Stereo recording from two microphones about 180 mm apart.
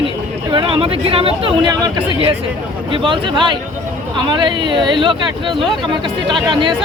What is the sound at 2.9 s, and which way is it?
Speech, 25° right (ahead or behind).